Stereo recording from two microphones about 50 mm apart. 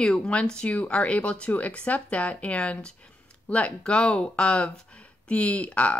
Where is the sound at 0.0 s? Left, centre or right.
Centre.